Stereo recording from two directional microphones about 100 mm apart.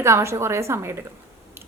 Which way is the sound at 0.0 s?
30° right (ahead or behind).